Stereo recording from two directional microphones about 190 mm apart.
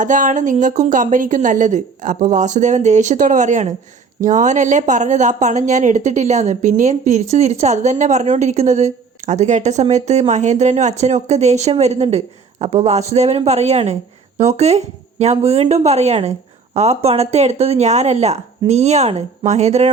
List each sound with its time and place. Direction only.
0.0 s a woman's voice: 40° right (ahead or behind)